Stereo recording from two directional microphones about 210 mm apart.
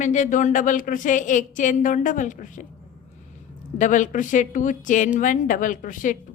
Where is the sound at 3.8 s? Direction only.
35° left (ahead or behind).